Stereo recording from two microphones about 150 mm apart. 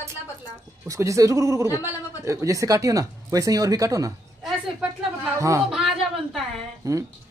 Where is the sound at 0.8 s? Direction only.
20° right (ahead or behind).